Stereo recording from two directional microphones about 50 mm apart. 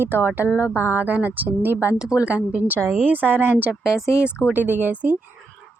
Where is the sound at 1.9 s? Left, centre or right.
Centre.